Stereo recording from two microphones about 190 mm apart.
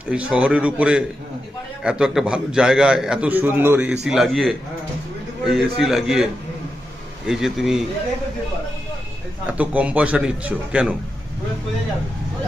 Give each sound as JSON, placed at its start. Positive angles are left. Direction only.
{"t": 0.1, "sound": "a man's voice", "side_deg": -5}
{"t": 7.3, "sound": "a man's voice", "side_deg": 0}
{"t": 9.5, "sound": "a man's voice", "side_deg": -5}